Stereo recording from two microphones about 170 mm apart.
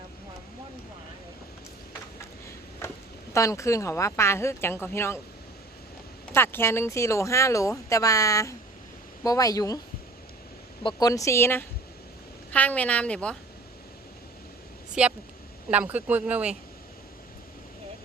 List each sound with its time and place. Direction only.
2.8 s a sound: 15° left (ahead or behind)
3.3 s speech: 20° left (ahead or behind)
6.3 s speech: 15° left (ahead or behind)
10.8 s speech: 20° left (ahead or behind)
15.0 s speech: 5° right (ahead or behind)